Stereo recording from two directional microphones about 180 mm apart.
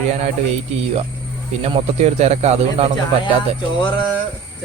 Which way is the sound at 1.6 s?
35° right (ahead or behind).